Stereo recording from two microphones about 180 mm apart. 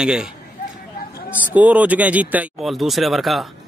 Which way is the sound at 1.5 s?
10° right (ahead or behind).